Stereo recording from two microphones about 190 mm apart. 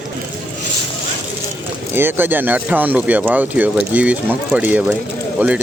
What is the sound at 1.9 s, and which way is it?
Speech, 10° right (ahead or behind).